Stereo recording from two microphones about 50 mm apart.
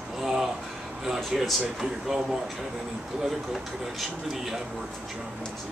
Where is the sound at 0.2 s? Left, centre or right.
Centre.